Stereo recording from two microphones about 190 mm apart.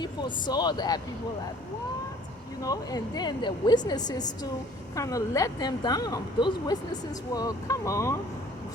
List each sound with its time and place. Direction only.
0.0 s a woman's voice: 25° left (ahead or behind)
2.6 s a woman's voice: 20° left (ahead or behind)